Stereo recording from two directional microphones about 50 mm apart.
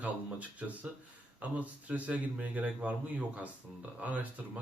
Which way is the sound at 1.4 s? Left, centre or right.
Right.